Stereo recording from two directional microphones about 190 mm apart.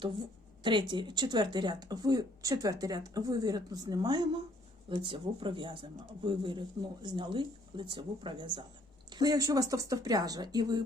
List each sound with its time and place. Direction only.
0.6 s speech: 25° right (ahead or behind)